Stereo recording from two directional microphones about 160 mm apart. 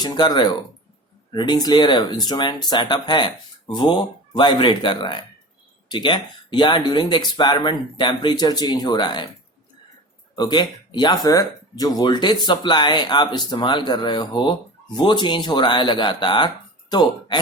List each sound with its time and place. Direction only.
0.0 s speech: 25° left (ahead or behind)
10.3 s speech: 25° left (ahead or behind)